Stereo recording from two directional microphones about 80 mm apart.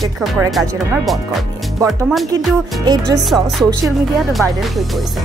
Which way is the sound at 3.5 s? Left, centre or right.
Centre.